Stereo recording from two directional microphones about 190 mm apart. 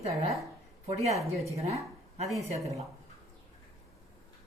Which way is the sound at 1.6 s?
35° right (ahead or behind).